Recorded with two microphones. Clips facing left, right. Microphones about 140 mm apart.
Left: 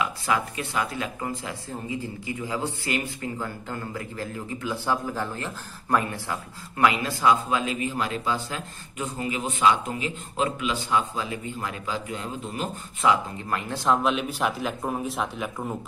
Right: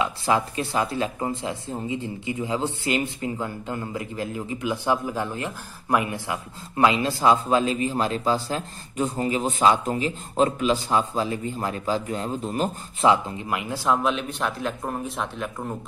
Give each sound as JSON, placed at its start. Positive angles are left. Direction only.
{"t": 0.0, "sound": "speech", "side_deg": -30}
{"t": 13.4, "sound": "speech", "side_deg": -10}